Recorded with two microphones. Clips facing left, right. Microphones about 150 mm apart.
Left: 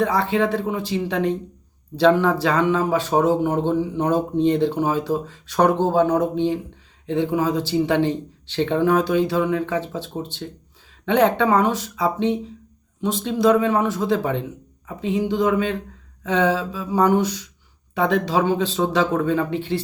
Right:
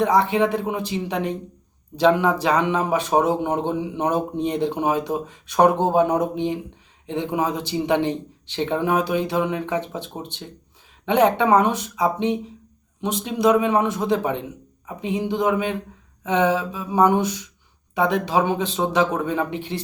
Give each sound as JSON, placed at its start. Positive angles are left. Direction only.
{"t": 0.0, "sound": "speech", "side_deg": -15}